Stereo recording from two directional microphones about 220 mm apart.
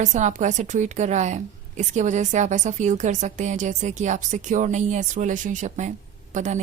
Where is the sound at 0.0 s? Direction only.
35° right (ahead or behind).